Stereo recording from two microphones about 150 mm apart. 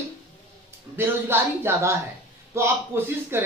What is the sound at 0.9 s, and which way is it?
Speech, 15° right (ahead or behind).